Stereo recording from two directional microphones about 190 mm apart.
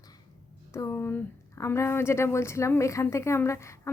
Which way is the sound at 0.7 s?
15° left (ahead or behind).